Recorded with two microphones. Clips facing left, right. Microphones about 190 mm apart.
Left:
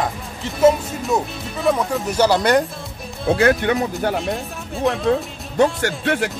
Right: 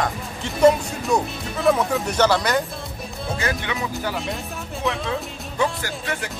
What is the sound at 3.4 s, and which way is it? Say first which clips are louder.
Speech: left 10 dB; 50° left (ahead or behind).